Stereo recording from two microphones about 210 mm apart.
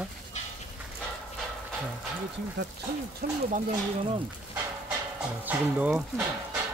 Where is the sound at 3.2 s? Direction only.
45° right (ahead or behind).